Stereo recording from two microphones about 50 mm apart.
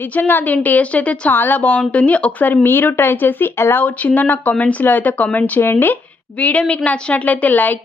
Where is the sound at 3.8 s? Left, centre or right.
Left.